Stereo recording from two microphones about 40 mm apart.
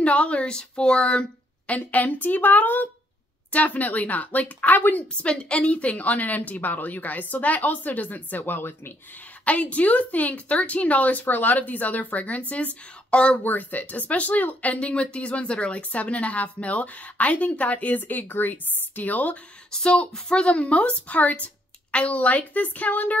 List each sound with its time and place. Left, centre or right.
0.0 s a woman's voice: left
1.7 s speech: left
5.5 s speech: left
8.4 s speech: left
9.4 s a woman's voice: left
13.4 s speech: left
19.7 s a woman's voice: left